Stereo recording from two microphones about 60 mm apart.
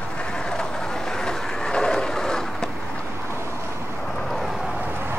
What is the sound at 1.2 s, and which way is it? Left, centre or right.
Train, centre.